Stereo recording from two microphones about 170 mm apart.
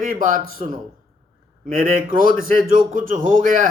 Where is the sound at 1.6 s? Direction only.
55° right (ahead or behind).